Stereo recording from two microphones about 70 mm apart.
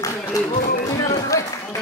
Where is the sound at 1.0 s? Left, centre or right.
Left.